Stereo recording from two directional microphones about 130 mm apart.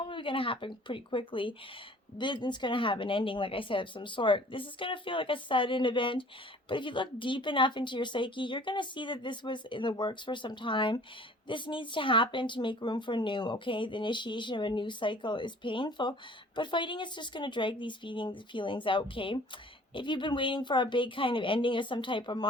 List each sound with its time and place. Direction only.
0.0 s speech: 40° left (ahead or behind)